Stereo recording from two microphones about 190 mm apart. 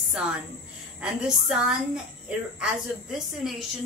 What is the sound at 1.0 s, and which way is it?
A woman's voice, 5° right (ahead or behind).